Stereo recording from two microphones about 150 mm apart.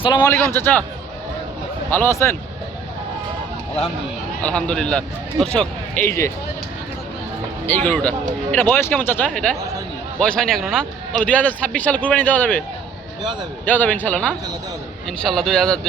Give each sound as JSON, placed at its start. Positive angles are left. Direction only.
{"t": 0.0, "sound": "a man's voice", "side_deg": 30}
{"t": 0.3, "sound": "a man's voice", "side_deg": 15}
{"t": 1.9, "sound": "a man's voice", "side_deg": 15}
{"t": 4.4, "sound": "a man's voice", "side_deg": 10}
{"t": 7.9, "sound": "a man's voice", "side_deg": 10}
{"t": 13.7, "sound": "a man's voice", "side_deg": 10}